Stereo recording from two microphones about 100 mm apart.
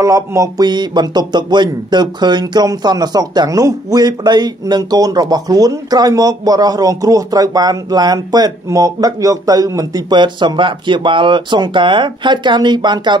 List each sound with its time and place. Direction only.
0.0 s speech: 35° right (ahead or behind); by 13.2 s 50° right (ahead or behind)